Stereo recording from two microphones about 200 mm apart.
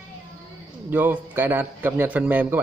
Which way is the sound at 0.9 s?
10° right (ahead or behind).